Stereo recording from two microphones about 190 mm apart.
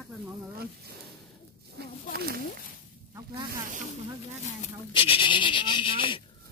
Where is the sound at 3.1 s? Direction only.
20° right (ahead or behind).